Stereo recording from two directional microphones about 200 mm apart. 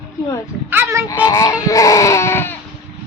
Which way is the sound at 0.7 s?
15° right (ahead or behind).